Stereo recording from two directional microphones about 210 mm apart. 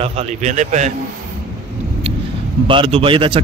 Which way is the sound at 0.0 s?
30° right (ahead or behind).